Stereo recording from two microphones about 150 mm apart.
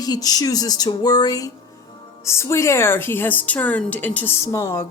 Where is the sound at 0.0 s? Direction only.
25° left (ahead or behind).